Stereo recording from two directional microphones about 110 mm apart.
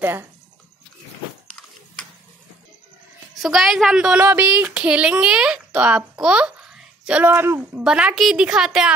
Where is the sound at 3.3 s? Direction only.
5° right (ahead or behind).